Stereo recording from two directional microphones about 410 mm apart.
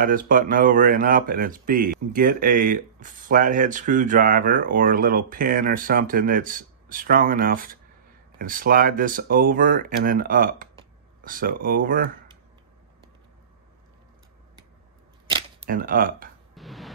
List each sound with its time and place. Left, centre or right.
0.0 s speech: centre
15.2 s camera: centre
16.5 s a sound: centre